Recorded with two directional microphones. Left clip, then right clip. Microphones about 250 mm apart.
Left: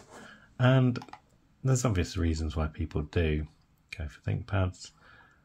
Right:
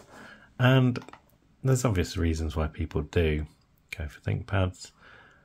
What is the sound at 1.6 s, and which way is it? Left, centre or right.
Speech, centre.